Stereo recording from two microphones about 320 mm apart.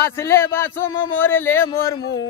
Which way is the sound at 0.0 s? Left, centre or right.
Centre.